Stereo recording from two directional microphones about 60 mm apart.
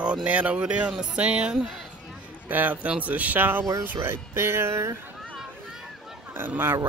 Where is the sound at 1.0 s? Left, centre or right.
Centre.